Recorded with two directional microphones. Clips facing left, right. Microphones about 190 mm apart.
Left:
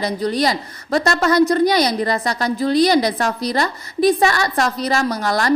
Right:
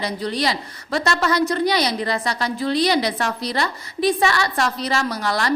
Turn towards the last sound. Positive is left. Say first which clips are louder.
# left 4 dB
turn(degrees=45)  # may be behind; listen again after turning